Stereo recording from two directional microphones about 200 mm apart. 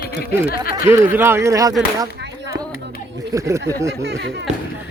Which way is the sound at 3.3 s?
15° right (ahead or behind).